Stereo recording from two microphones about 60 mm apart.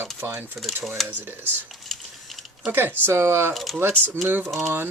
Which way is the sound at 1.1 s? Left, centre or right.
Right.